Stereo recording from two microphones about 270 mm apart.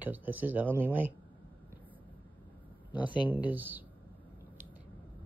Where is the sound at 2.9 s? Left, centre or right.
Centre.